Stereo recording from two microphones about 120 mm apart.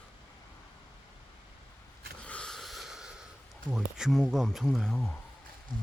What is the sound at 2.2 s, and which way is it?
Snort, 10° left (ahead or behind).